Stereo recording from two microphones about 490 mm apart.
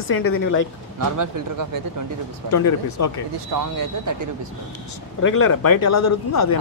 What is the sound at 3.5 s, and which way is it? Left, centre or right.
Speech, right.